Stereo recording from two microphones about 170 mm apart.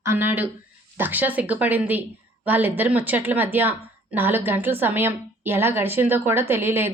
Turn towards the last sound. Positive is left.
turn(degrees=-15)  # may be behind; listen again after turning